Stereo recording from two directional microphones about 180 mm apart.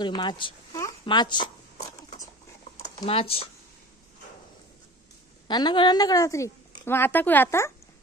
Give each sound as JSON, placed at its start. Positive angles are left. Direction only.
{"t": 0.0, "sound": "speech", "side_deg": 25}
{"t": 3.1, "sound": "speech", "side_deg": 30}
{"t": 5.5, "sound": "speech", "side_deg": 25}